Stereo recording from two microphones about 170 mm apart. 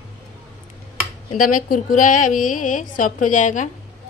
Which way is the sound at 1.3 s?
50° left (ahead or behind).